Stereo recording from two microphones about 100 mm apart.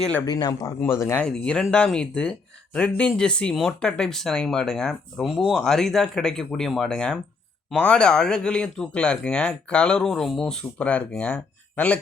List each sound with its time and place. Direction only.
0.3 s speech: 40° left (ahead or behind)
0.8 s speech: 25° left (ahead or behind)
1.2 s speech: 10° left (ahead or behind)